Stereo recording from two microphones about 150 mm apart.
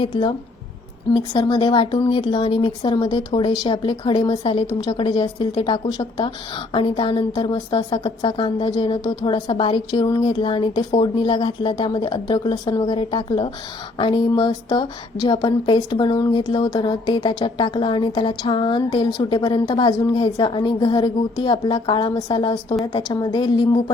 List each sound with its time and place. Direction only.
0.0 s a woman's voice: 35° left (ahead or behind)